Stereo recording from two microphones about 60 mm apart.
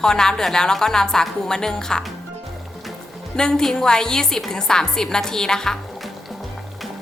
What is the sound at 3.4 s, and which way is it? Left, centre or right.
Speech, centre.